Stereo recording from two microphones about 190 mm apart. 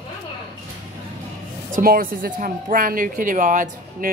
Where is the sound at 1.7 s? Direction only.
50° right (ahead or behind).